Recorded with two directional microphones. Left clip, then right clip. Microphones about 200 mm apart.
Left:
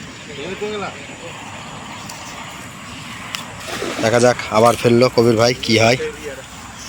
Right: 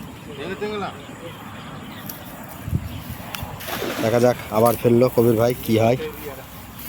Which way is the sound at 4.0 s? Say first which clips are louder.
Left 4 dB; centre (ahead or behind).